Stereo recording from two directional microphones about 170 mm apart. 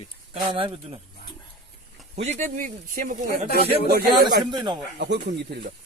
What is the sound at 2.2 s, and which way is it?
Speech, 40° right (ahead or behind).